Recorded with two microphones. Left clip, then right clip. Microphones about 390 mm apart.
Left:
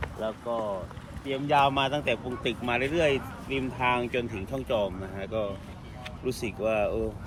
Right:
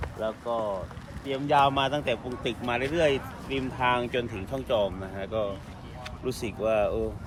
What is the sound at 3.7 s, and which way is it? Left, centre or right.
Speech, centre.